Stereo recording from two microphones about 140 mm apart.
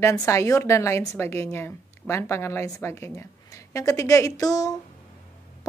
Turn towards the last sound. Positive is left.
turn(degrees=25)  # may be behind; listen again after turning